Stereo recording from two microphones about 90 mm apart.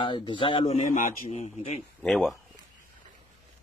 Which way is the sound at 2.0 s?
Centre (ahead or behind).